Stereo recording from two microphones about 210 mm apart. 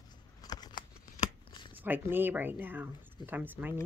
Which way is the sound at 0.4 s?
20° left (ahead or behind).